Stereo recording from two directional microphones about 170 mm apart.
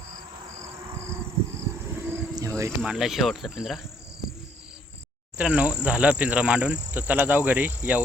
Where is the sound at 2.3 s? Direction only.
20° right (ahead or behind).